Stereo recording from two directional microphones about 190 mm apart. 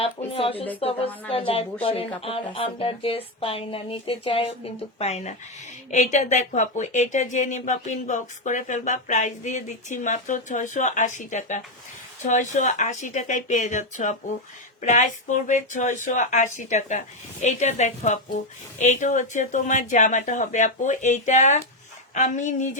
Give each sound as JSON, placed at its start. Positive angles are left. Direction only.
{"t": 0.3, "sound": "speech", "side_deg": 30}